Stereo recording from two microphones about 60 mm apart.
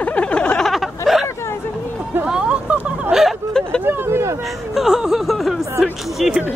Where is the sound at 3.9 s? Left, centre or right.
Right.